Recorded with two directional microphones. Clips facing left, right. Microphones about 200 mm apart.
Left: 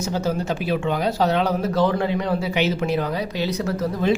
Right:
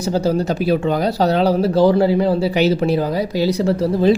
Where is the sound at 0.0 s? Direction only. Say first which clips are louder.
Right 6 dB; 35° right (ahead or behind).